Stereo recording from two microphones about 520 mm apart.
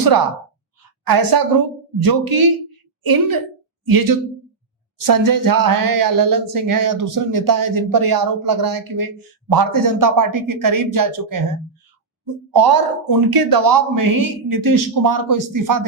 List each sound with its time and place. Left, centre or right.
1.0 s a woman's voice: right
12.2 s speech: right